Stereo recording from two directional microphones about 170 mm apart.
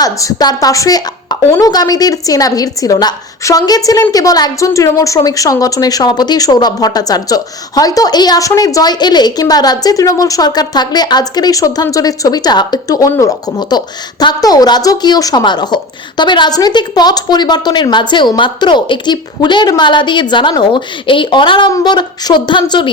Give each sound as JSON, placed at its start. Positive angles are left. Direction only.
{"t": 0.0, "sound": "a woman's voice", "side_deg": 20}